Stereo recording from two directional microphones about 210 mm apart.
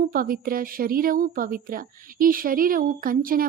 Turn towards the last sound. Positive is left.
turn(degrees=-40)  # may be behind; listen again after turning